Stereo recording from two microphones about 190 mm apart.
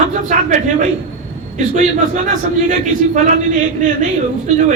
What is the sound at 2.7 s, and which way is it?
Speech, 40° right (ahead or behind).